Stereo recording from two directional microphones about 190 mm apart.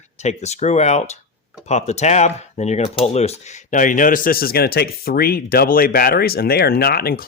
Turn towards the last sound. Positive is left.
turn(degrees=55)  # may be behind; listen again after turning